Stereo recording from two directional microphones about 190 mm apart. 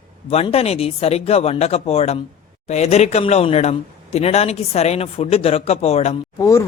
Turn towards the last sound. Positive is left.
turn(degrees=15)  # may be behind; listen again after turning